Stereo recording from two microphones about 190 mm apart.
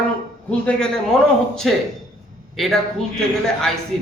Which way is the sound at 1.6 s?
Centre (ahead or behind).